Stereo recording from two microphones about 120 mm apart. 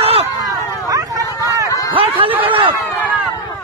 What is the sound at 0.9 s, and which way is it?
Vehicle, 30° right (ahead or behind).